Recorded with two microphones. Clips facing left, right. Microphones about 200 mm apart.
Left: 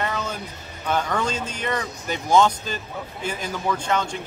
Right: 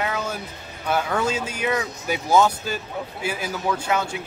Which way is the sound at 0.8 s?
10° right (ahead or behind).